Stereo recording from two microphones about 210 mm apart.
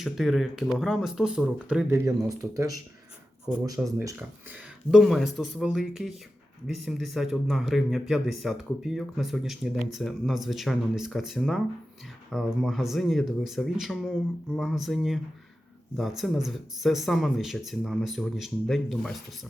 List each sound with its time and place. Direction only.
0.0 s speech: centre (ahead or behind)
3.8 s speech: 15° right (ahead or behind)
4.9 s speech: centre (ahead or behind)